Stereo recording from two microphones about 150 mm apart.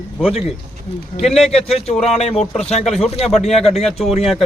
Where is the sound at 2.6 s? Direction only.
45° left (ahead or behind).